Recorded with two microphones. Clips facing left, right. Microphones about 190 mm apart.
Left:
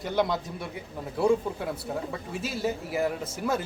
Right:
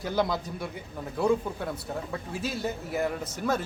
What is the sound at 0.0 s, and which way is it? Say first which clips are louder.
Speech: left 1 dB; centre (ahead or behind).